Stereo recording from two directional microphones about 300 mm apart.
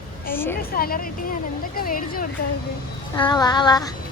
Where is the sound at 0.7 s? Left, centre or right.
Left.